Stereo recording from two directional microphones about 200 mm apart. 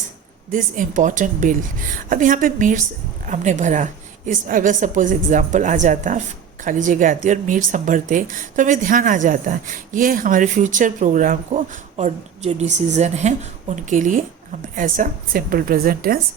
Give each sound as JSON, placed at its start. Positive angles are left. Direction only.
{"t": 0.5, "sound": "a woman's voice", "side_deg": -40}